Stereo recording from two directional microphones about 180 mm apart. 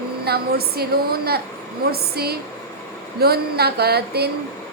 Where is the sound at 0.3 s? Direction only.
60° right (ahead or behind).